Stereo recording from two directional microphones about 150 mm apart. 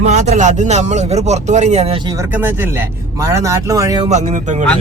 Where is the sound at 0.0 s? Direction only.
50° right (ahead or behind).